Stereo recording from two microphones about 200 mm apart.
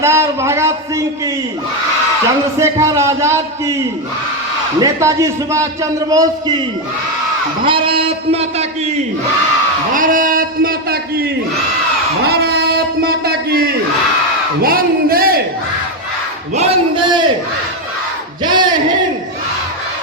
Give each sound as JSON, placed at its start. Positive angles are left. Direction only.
{"t": 0.0, "sound": "a man's voice", "side_deg": -15}
{"t": 2.6, "sound": "a man's voice", "side_deg": -15}
{"t": 4.8, "sound": "a man's voice", "side_deg": -15}
{"t": 7.6, "sound": "a man's voice", "side_deg": -25}
{"t": 9.9, "sound": "a sound", "side_deg": -45}
{"t": 16.6, "sound": "a man's voice", "side_deg": -25}
{"t": 18.4, "sound": "a sound", "side_deg": -20}